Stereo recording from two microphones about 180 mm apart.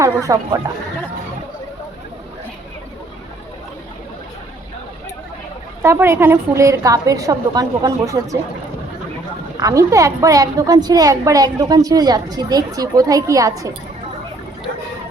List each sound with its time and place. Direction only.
0.0 s a woman's voice: 20° right (ahead or behind)
5.8 s a woman's voice: 15° right (ahead or behind)
9.6 s a woman's voice: 20° right (ahead or behind)